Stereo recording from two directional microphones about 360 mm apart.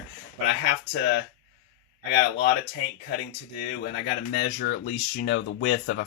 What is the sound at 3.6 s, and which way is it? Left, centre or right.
Speech, left.